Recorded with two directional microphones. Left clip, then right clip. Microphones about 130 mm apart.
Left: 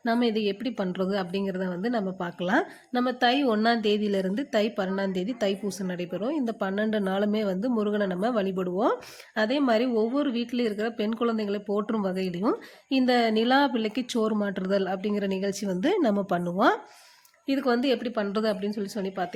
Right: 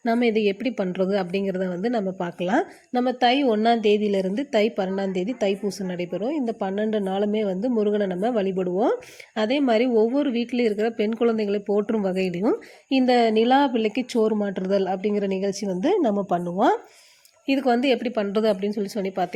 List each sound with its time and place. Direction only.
0.0 s a woman's voice: 20° right (ahead or behind); by 16.1 s centre (ahead or behind)
17.4 s a woman's voice: 20° right (ahead or behind)